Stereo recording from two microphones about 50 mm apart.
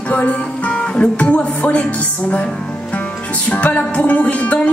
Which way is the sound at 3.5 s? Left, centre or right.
Left.